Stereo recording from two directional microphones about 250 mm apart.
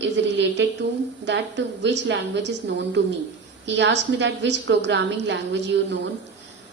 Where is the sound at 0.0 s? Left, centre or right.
Right.